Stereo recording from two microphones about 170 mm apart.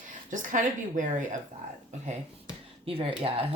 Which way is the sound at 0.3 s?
50° right (ahead or behind).